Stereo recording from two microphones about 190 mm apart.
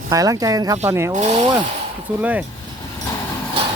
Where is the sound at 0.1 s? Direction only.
20° right (ahead or behind).